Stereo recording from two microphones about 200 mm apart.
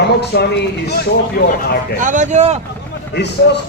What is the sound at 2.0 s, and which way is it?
Speech, 40° right (ahead or behind).